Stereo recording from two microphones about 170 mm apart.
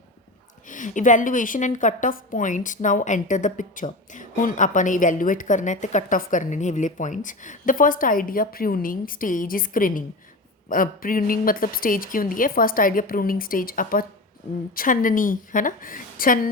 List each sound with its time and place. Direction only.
0.7 s a woman's voice: 50° left (ahead or behind)